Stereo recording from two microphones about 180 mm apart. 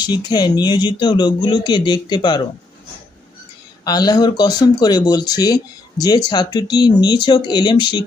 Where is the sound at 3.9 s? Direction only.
20° left (ahead or behind).